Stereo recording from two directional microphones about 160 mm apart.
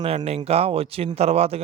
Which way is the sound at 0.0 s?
35° right (ahead or behind).